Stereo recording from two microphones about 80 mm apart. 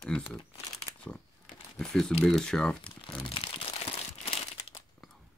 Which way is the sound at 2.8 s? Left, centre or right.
Left.